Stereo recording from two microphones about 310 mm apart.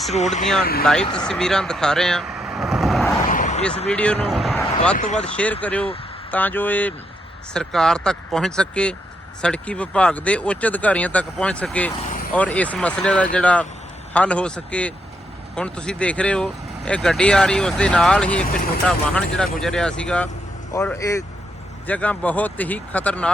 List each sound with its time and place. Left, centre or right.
0.1 s speech: left
1.1 s speech: centre
3.2 s a sound: left
3.8 s vehicle: centre
4.9 s speech: left
5.3 s speech: centre